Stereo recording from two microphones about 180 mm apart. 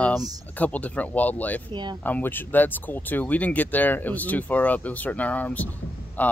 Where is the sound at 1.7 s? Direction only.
25° right (ahead or behind).